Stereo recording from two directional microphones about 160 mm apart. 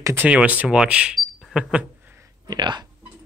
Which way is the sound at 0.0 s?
10° right (ahead or behind).